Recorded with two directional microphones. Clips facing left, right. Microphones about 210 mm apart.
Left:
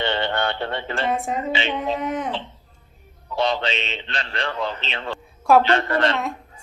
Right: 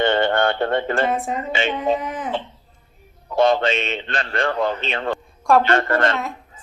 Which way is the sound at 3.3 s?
50° right (ahead or behind).